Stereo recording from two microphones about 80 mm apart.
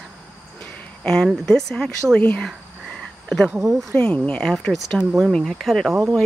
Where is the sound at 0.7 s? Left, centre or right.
Centre.